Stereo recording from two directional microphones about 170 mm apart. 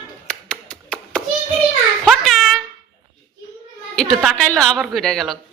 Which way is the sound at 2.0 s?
Centre (ahead or behind).